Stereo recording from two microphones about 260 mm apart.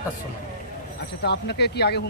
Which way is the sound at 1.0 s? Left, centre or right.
Left.